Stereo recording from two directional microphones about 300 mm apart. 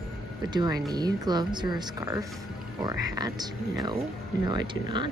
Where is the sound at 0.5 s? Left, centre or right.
Centre.